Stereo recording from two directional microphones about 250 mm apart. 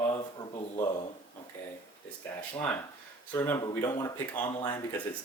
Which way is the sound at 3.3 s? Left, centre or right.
Centre.